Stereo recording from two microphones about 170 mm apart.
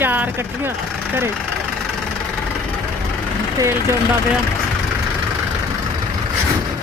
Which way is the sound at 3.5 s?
15° right (ahead or behind).